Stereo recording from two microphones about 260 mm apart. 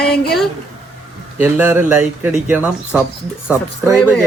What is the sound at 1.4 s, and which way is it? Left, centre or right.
Speech, centre.